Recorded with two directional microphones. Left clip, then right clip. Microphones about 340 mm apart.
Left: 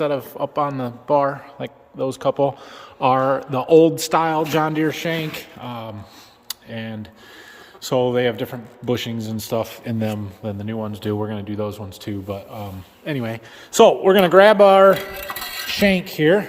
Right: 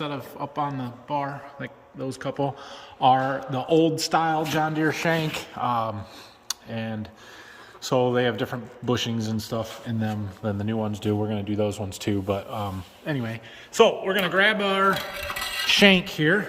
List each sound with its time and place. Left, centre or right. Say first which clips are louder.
0.0 s speech: left 10 dB; centre
13.1 s speech: left 5 dB; centre
13.7 s speech: left 7 dB; centre
15.7 s speech: right 1 dB; centre